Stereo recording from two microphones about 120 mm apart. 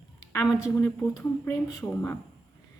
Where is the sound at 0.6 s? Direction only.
25° left (ahead or behind).